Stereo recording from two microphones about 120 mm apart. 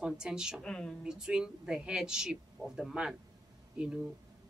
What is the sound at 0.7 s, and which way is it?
Speech, 5° left (ahead or behind).